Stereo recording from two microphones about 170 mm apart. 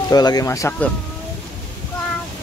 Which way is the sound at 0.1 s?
20° left (ahead or behind).